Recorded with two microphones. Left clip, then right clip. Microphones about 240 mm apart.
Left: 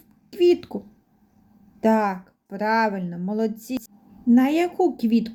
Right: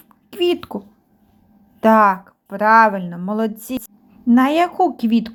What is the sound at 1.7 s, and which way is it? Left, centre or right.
Speech, centre.